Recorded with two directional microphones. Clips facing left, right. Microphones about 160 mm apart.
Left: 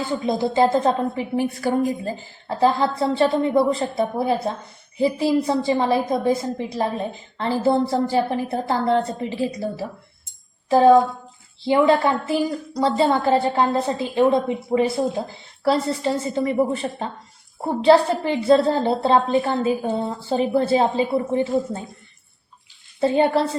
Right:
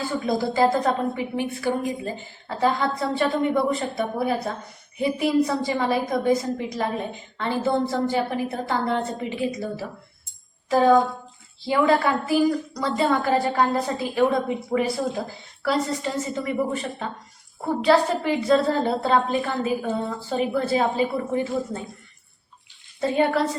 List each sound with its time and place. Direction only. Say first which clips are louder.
0.3 s a woman's voice: left 2 dB; 20° left (ahead or behind)
1.4 s a woman's voice: left 6 dB; 35° left (ahead or behind)
11.6 s a woman's voice: left 3 dB; 25° left (ahead or behind)
23.0 s a woman's voice: left 3 dB; 30° left (ahead or behind)